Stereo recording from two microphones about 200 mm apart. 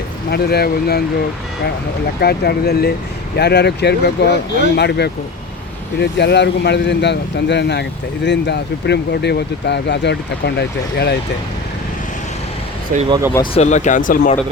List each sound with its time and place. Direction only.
0.3 s speech: 55° left (ahead or behind)
2.2 s speech: 55° left (ahead or behind)
12.9 s speech: 40° right (ahead or behind)
13.3 s speech: 25° left (ahead or behind); by 14.3 s 40° left (ahead or behind)